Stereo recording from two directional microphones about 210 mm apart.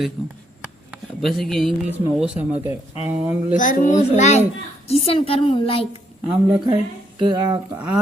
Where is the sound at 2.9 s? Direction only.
30° left (ahead or behind).